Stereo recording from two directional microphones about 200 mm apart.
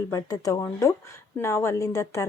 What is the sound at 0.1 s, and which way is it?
Speech, 20° left (ahead or behind).